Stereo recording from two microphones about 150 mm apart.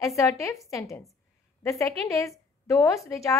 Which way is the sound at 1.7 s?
20° left (ahead or behind).